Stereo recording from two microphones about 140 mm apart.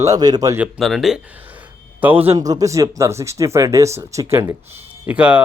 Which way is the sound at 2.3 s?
25° right (ahead or behind).